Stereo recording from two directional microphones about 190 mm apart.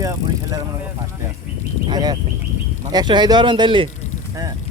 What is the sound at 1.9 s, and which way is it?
Speech, 20° right (ahead or behind).